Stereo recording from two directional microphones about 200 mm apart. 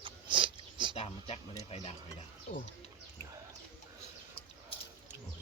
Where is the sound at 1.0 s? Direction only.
30° left (ahead or behind).